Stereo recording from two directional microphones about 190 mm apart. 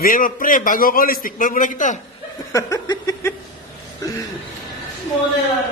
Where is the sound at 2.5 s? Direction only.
15° left (ahead or behind).